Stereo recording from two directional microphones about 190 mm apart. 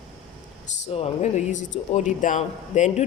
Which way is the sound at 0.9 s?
30° left (ahead or behind).